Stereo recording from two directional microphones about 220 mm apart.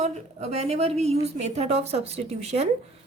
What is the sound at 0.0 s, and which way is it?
A woman's voice, 30° right (ahead or behind).